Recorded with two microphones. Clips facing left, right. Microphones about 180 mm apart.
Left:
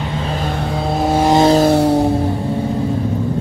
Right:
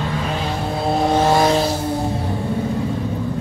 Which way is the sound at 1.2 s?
20° left (ahead or behind).